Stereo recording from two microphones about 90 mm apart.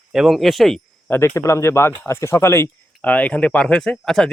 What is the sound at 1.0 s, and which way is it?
Speech, 25° left (ahead or behind).